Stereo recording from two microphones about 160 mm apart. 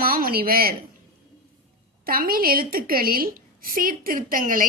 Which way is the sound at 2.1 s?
65° right (ahead or behind).